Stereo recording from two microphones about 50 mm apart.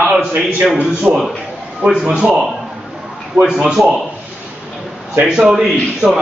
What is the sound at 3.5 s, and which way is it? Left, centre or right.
Speech, centre.